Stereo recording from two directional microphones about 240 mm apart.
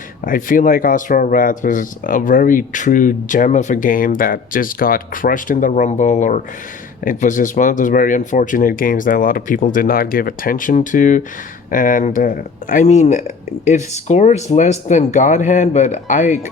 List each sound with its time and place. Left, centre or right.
0.3 s speech: left